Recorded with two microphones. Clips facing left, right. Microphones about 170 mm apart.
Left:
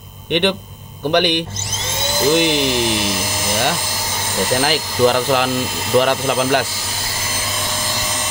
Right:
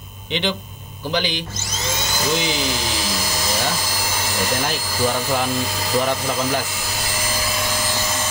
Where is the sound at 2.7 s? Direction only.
25° left (ahead or behind).